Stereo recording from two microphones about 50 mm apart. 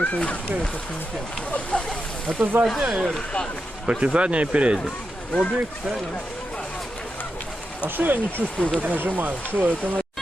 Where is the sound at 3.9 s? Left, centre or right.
Right.